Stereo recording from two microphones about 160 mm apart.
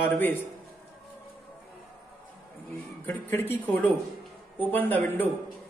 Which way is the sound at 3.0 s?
15° left (ahead or behind).